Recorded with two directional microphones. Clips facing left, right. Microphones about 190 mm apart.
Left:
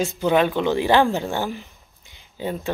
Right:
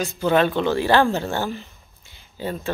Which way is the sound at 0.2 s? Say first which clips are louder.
Right 1 dB; 15° left (ahead or behind).